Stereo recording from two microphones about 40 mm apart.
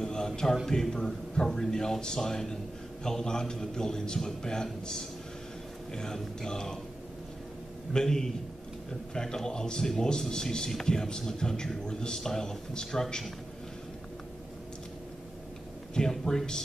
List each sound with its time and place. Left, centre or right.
0.0 s a sound: centre
0.7 s a man's voice: centre
5.9 s a man's voice: centre
7.9 s a man's voice: centre
16.1 s a man's voice: centre